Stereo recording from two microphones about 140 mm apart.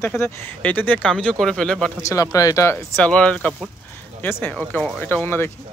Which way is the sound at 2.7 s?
10° left (ahead or behind).